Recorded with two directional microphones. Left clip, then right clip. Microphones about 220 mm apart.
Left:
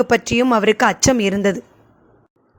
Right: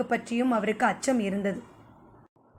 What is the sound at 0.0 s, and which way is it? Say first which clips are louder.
Speech: left 12 dB; 45° left (ahead or behind).